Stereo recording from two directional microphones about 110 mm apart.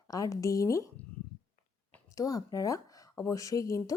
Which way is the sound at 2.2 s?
30° left (ahead or behind).